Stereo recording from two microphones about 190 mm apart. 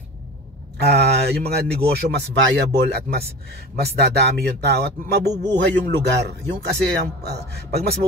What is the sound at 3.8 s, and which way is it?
Speech, 60° right (ahead or behind).